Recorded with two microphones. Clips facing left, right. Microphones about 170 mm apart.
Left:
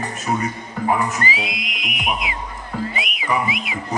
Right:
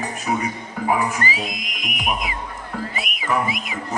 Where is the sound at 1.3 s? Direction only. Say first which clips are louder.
Left 1 dB; 45° right (ahead or behind).